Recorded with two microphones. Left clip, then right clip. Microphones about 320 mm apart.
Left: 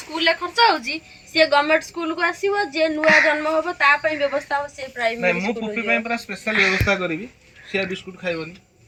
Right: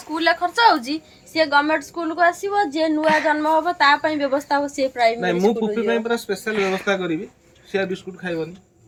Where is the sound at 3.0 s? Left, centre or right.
Centre.